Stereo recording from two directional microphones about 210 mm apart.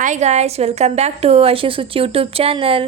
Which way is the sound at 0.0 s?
35° right (ahead or behind).